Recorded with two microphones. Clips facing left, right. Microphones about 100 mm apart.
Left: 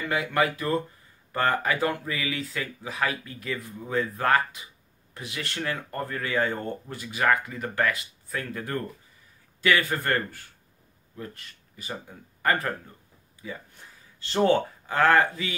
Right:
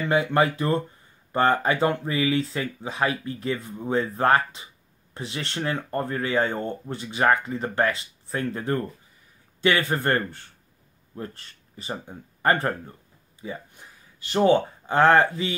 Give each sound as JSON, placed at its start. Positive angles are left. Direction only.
{"t": 0.1, "sound": "speech", "side_deg": -30}
{"t": 13.7, "sound": "speech", "side_deg": -15}